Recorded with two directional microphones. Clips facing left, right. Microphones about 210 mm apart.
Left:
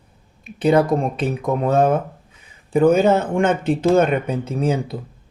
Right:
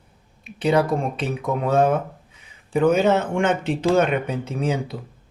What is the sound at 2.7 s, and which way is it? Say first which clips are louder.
Speech: left 3 dB; 50° left (ahead or behind).